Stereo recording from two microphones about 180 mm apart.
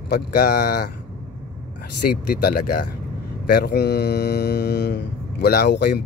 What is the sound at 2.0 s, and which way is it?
Speech, 60° left (ahead or behind).